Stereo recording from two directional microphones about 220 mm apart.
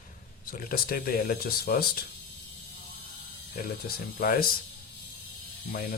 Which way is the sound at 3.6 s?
40° left (ahead or behind).